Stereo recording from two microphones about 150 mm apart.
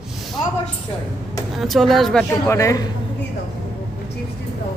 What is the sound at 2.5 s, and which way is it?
Speech, 20° left (ahead or behind).